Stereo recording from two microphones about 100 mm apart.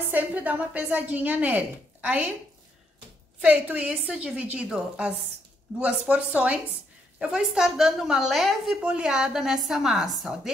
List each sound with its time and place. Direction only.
0.1 s a woman's voice: 20° right (ahead or behind)
3.3 s a woman's voice: 15° right (ahead or behind)